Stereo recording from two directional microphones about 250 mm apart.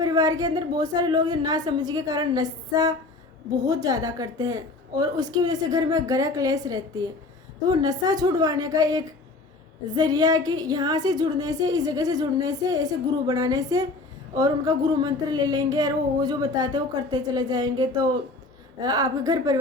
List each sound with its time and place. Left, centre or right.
0.0 s a woman's voice: centre